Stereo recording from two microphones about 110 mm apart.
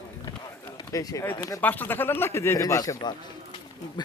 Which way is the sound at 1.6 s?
15° left (ahead or behind).